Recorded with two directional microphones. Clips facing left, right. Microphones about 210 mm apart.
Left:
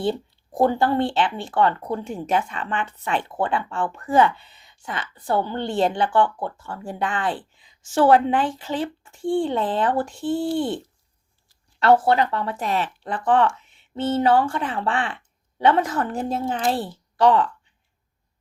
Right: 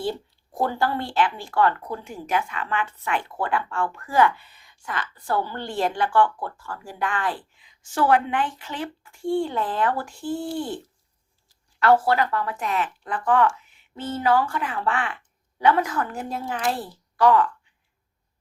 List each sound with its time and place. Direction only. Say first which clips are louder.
0.0 s speech: left 4 dB; 20° left (ahead or behind)
11.8 s a woman's voice: left 2 dB; 25° left (ahead or behind)